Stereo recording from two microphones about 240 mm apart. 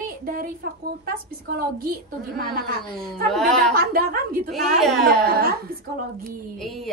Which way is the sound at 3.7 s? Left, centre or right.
Right.